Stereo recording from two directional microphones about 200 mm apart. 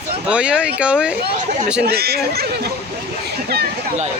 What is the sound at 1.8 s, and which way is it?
Speech, 50° right (ahead or behind).